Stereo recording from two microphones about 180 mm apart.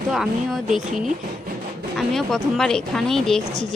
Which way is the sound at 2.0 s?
Centre (ahead or behind).